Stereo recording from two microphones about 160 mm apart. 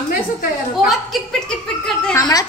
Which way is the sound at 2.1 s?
25° left (ahead or behind).